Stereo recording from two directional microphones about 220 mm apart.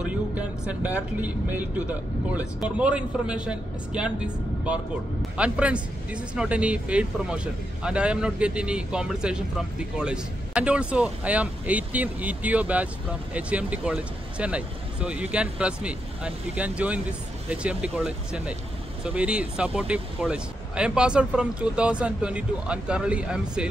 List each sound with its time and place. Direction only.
0.0 s speech: 5° right (ahead or behind)
5.4 s speech: 5° right (ahead or behind)